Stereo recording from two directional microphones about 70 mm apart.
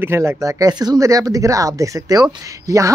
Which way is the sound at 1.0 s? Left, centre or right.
Right.